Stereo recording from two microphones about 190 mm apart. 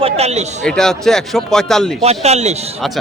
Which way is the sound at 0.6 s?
5° left (ahead or behind).